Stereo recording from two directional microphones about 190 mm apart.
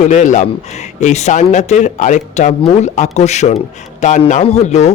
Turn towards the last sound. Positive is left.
turn(degrees=35)  # may be behind; listen again after turning